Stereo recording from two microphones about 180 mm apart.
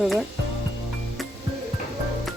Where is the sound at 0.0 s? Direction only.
Centre (ahead or behind).